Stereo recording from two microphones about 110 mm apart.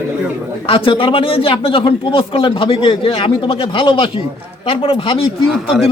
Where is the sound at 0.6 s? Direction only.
55° left (ahead or behind).